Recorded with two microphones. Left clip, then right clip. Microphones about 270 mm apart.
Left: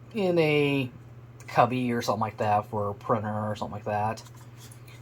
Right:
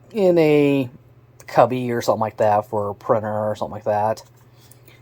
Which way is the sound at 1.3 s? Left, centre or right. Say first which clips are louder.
Right 8 dB; right.